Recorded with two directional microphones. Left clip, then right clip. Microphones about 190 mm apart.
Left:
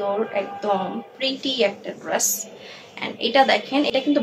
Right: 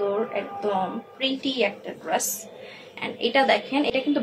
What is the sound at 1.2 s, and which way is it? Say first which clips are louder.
Speech: left 3 dB; 20° left (ahead or behind).